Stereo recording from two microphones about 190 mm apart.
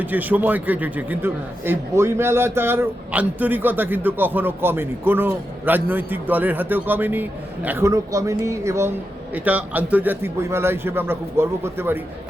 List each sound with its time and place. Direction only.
0.0 s a man's voice: 10° right (ahead or behind)